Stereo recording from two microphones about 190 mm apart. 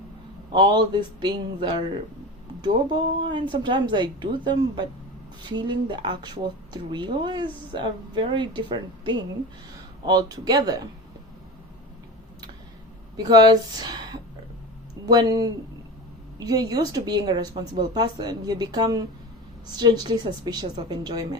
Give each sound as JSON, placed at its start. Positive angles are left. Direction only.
{"t": 0.5, "sound": "speech", "side_deg": -25}
{"t": 13.1, "sound": "speech", "side_deg": -20}